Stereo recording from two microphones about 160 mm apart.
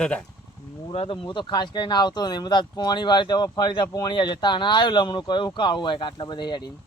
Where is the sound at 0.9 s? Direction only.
35° left (ahead or behind).